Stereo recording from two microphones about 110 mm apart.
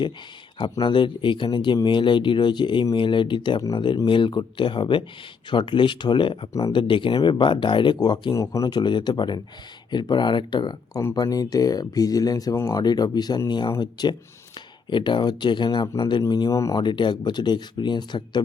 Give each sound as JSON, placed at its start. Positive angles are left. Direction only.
{"t": 0.6, "sound": "speech", "side_deg": 45}
{"t": 16.5, "sound": "speech", "side_deg": 30}